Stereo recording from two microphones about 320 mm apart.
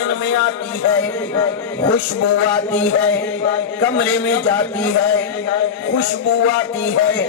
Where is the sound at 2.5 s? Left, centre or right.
Centre.